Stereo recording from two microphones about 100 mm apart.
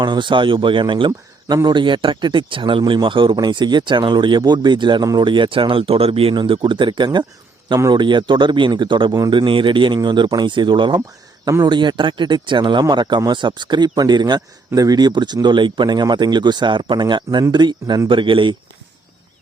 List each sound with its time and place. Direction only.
0.0 s speech: 50° right (ahead or behind); by 6.4 s 65° right (ahead or behind)
6.4 s speech: 55° right (ahead or behind)